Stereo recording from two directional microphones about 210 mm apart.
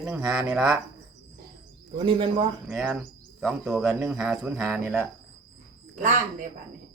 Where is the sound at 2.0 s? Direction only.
25° right (ahead or behind).